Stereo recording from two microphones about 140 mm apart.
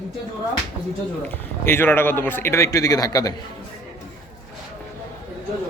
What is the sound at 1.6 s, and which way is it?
Speech, 15° left (ahead or behind).